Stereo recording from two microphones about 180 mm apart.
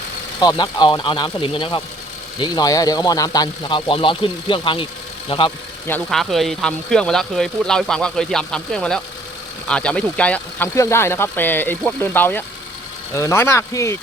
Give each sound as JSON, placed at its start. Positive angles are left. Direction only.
{"t": 0.3, "sound": "speech", "side_deg": 25}
{"t": 5.9, "sound": "speech", "side_deg": 0}